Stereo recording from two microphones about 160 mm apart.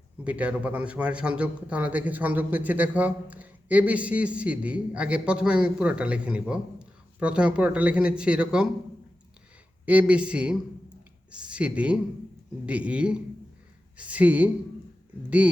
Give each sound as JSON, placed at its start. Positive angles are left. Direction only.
{"t": 0.3, "sound": "a man's voice", "side_deg": -10}
{"t": 9.8, "sound": "a man's voice", "side_deg": -10}